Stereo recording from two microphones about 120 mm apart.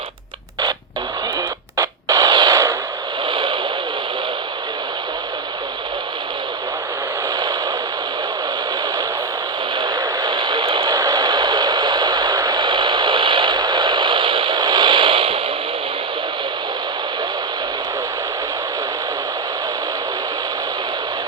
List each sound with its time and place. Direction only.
1.7 s radio: 25° right (ahead or behind)
3.2 s a sound: 45° right (ahead or behind)
9.7 s vehicle: 35° right (ahead or behind)